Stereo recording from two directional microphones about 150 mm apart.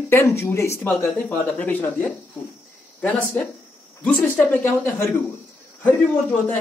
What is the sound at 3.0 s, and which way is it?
Speech, 10° left (ahead or behind).